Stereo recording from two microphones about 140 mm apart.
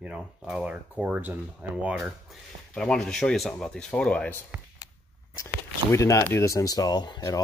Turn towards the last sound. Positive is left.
turn(degrees=30)  # may be behind; listen again after turning